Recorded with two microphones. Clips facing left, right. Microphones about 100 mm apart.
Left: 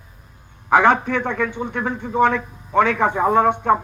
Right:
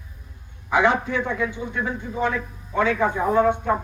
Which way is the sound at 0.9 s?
65° left (ahead or behind).